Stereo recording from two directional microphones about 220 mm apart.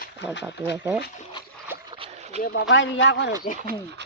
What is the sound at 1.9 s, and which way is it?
Boat, 25° right (ahead or behind).